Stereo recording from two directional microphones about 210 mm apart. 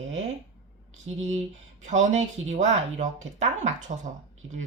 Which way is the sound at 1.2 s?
35° right (ahead or behind).